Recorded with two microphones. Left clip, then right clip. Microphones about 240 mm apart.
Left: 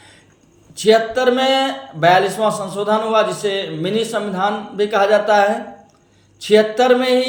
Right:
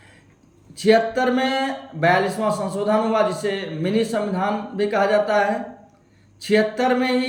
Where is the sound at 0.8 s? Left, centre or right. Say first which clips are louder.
Left 3 dB; centre.